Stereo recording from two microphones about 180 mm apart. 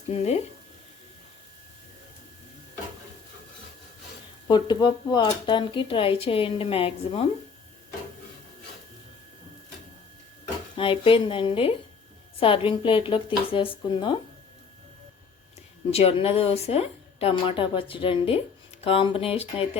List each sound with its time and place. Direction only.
0.1 s a woman's voice: 35° left (ahead or behind)
4.4 s speech: 25° left (ahead or behind)
10.8 s speech: 30° left (ahead or behind)
15.9 s a woman's voice: 35° left (ahead or behind)